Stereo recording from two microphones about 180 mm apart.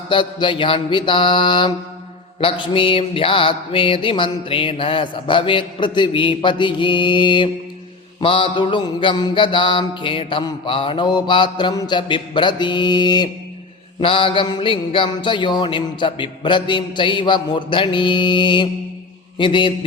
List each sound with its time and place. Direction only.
0.1 s mantra: 25° left (ahead or behind)